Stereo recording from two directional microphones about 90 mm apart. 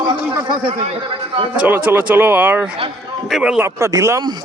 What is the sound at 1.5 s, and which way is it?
Speech, 20° right (ahead or behind).